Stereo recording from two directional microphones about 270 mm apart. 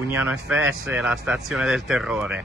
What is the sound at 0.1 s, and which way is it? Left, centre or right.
A man's voice, centre.